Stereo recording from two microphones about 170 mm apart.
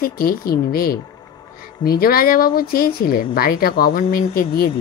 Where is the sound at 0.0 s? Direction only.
60° left (ahead or behind).